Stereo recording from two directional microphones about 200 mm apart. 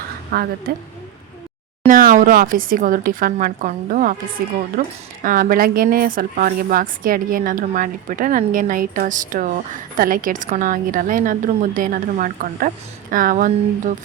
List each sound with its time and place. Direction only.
0.3 s speech: 50° right (ahead or behind)
1.9 s speech: 45° right (ahead or behind)